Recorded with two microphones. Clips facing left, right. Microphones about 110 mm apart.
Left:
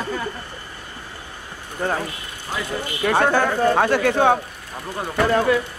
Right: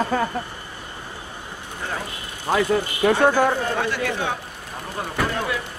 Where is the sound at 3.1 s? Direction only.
55° left (ahead or behind).